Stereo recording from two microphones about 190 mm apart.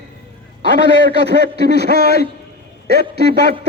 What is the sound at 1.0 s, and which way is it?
A man's voice, 60° right (ahead or behind).